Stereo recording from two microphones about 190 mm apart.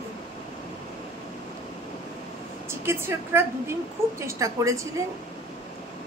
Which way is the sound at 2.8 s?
15° right (ahead or behind).